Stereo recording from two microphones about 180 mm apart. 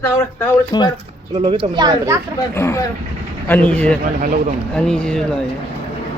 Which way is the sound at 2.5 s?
15° left (ahead or behind).